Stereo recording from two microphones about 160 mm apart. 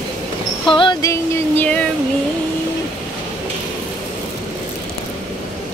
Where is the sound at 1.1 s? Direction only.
15° left (ahead or behind).